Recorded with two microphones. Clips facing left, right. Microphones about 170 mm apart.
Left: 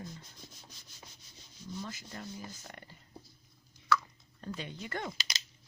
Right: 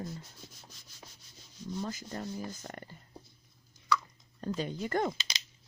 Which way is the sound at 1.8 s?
40° right (ahead or behind).